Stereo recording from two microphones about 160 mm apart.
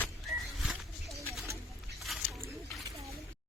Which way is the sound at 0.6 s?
Centre (ahead or behind).